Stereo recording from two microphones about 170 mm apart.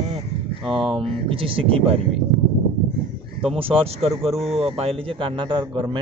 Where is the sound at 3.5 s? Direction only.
35° right (ahead or behind).